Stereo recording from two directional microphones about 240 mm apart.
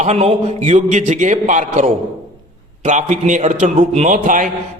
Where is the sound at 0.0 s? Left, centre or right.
Right.